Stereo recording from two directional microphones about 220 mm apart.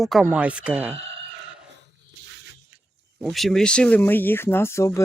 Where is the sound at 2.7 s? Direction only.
50° right (ahead or behind).